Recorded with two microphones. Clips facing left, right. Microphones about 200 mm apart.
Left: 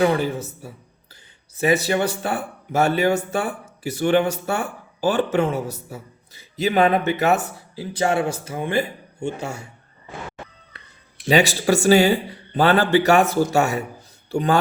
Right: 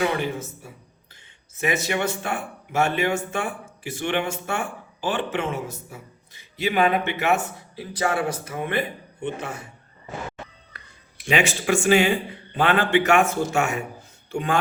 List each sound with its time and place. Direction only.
0.0 s speech: 35° left (ahead or behind)
11.3 s speech: 35° left (ahead or behind)